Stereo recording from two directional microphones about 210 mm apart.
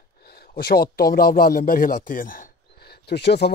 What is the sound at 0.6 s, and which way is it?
Speech, 45° left (ahead or behind).